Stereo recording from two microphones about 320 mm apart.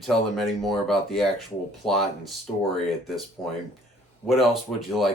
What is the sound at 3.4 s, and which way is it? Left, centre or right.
Speech, centre.